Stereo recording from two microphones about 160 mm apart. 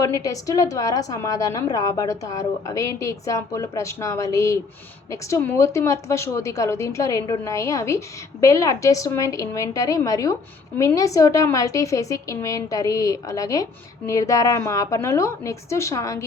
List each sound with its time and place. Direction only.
0.0 s a woman's voice: 20° left (ahead or behind)